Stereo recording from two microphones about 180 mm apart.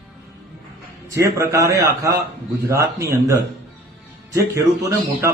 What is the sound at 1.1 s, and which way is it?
Speech, 15° right (ahead or behind).